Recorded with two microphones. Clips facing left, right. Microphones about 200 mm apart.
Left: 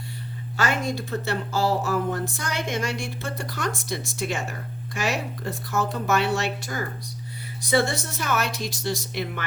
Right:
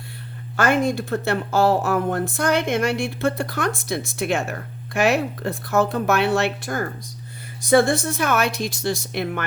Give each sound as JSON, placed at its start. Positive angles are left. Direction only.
{"t": 0.5, "sound": "speech", "side_deg": -55}